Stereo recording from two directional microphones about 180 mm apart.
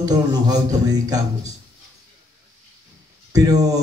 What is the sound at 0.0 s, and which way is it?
A man's voice, 20° right (ahead or behind).